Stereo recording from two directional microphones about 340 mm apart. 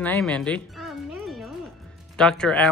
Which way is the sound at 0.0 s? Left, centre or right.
Centre.